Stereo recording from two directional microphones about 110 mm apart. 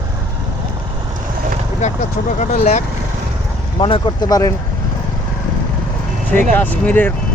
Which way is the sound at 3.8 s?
45° left (ahead or behind).